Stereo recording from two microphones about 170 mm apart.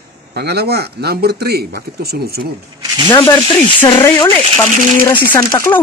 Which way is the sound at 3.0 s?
15° left (ahead or behind).